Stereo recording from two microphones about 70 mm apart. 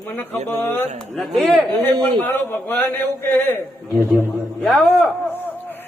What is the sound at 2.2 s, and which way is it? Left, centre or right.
A man's voice, left.